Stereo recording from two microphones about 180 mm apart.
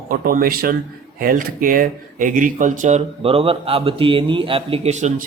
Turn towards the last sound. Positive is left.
turn(degrees=-40)  # may be behind; listen again after turning